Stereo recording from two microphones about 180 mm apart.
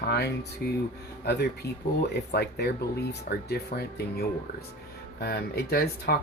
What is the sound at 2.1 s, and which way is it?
Speech, 65° left (ahead or behind).